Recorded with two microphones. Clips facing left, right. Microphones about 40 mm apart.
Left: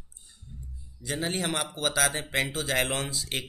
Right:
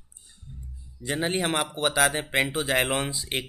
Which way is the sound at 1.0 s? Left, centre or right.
Right.